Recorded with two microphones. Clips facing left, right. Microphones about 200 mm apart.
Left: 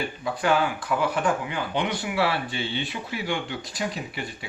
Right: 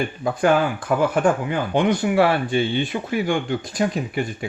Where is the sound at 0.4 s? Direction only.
50° right (ahead or behind).